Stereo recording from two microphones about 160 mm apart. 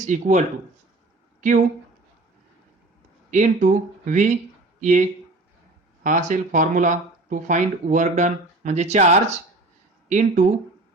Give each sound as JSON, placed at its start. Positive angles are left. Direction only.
{"t": 0.0, "sound": "speech", "side_deg": -50}
{"t": 3.2, "sound": "speech", "side_deg": -50}